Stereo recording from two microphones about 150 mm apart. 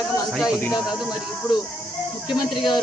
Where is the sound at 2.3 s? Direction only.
30° left (ahead or behind).